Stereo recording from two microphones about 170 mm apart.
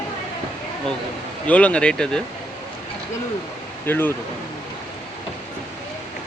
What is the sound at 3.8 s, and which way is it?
Speech, 10° left (ahead or behind).